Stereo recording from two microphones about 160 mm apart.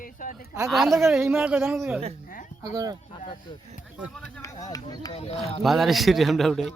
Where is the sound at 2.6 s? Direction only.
25° right (ahead or behind).